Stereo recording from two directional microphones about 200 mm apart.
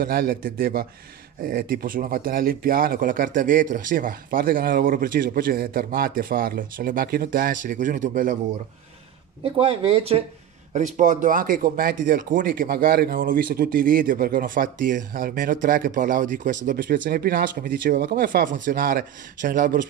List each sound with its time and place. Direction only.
0.0 s speech: 45° right (ahead or behind)
9.4 s speech: 30° right (ahead or behind)